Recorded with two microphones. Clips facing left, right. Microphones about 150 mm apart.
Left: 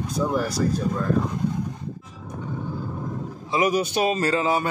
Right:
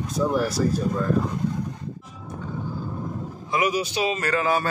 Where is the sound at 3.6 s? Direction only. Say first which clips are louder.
Left 3 dB; 50° left (ahead or behind).